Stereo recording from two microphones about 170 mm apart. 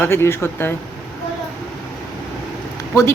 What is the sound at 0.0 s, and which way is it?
Speech, 15° left (ahead or behind).